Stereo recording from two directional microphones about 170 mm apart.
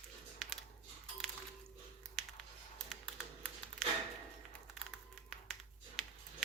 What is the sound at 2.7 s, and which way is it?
Computer keyboard, centre (ahead or behind).